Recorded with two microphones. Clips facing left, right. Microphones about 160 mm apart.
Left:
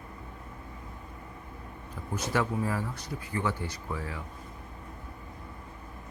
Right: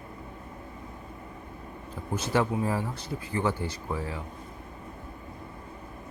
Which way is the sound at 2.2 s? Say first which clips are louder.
Right 3 dB; 30° right (ahead or behind).